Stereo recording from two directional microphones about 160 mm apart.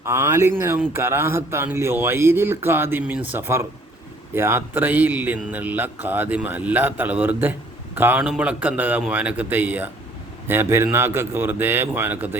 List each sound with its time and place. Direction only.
0.0 s a man's voice: 15° right (ahead or behind)